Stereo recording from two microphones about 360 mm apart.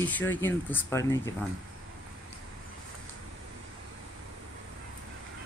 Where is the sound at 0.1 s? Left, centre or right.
Centre.